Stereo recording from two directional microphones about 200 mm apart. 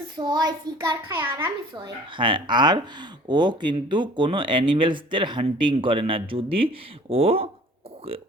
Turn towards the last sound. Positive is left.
turn(degrees=-30)  # may be behind; listen again after turning